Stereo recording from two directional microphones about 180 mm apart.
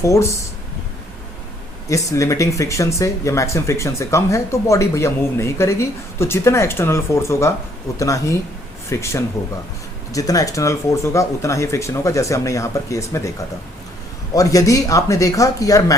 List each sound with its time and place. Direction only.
0.0 s speech: 15° left (ahead or behind)
1.9 s speech: 15° left (ahead or behind)
14.3 s speech: 20° left (ahead or behind)